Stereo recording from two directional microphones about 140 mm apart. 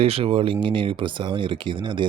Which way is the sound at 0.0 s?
45° right (ahead or behind).